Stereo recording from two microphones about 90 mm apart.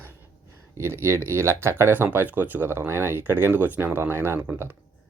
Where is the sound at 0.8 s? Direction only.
30° right (ahead or behind).